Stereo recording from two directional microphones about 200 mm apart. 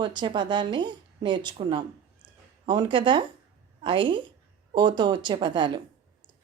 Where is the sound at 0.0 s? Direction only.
20° right (ahead or behind).